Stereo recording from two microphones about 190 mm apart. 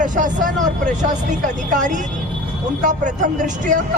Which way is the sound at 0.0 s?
45° right (ahead or behind).